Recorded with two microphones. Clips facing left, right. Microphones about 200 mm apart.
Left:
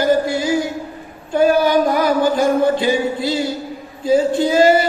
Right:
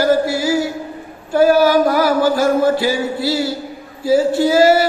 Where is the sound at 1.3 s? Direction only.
20° left (ahead or behind).